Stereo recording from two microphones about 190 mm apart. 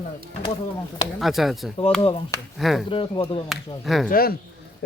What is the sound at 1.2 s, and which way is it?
Speech, centre (ahead or behind).